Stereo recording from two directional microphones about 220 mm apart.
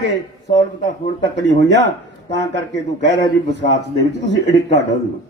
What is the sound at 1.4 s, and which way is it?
Speech, 55° right (ahead or behind).